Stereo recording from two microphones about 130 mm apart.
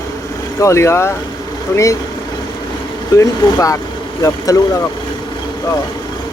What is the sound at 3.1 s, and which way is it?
Speech, 25° left (ahead or behind).